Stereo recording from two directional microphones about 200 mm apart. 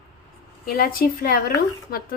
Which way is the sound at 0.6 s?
45° left (ahead or behind).